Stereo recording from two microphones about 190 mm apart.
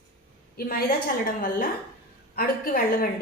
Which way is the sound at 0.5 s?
50° left (ahead or behind).